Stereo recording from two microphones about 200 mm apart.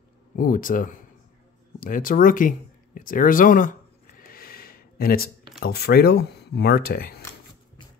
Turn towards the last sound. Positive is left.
turn(degrees=50)  # may be behind; listen again after turning